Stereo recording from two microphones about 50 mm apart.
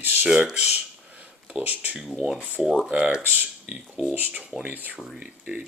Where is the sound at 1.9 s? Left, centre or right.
Centre.